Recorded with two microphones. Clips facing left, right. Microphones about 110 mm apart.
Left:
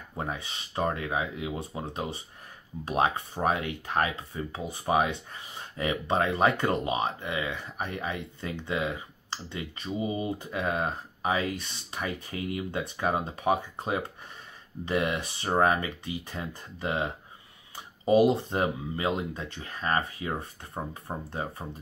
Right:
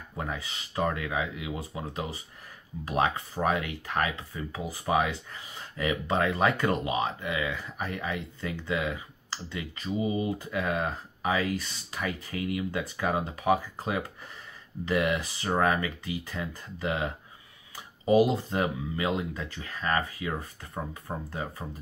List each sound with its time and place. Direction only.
0.2 s speech: 25° left (ahead or behind)